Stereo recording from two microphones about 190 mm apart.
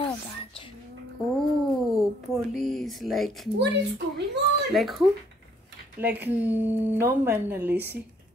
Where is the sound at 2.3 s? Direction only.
Centre (ahead or behind).